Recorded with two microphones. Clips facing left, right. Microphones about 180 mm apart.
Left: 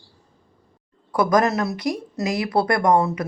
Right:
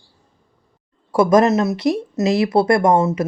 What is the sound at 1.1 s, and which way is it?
A woman's voice, 25° right (ahead or behind).